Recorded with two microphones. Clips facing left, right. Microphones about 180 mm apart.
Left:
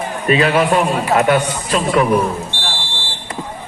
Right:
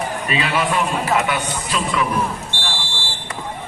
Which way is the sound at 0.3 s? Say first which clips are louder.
Left 9 dB; 45° left (ahead or behind).